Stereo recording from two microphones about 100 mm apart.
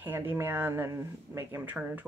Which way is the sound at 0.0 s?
20° right (ahead or behind).